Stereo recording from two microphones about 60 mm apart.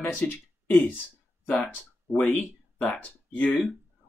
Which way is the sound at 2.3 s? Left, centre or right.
Left.